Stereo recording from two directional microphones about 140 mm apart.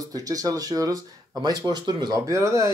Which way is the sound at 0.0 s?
25° right (ahead or behind).